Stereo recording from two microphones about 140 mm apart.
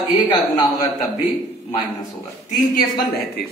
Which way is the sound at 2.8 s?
90° left.